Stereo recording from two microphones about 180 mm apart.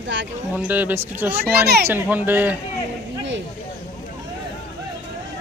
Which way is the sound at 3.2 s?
90° right.